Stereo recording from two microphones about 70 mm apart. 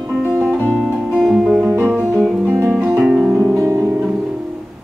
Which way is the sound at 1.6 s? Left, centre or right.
Right.